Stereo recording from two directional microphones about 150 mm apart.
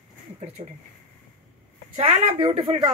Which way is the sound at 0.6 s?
35° right (ahead or behind).